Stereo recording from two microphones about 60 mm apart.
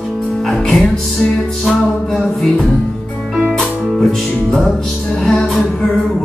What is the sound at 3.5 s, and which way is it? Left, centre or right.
Music, centre.